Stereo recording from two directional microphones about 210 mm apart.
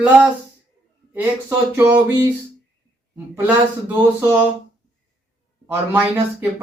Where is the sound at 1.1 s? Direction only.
10° right (ahead or behind).